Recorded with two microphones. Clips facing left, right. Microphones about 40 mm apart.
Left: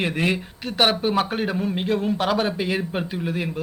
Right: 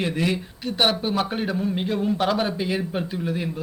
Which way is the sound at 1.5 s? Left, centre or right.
Left.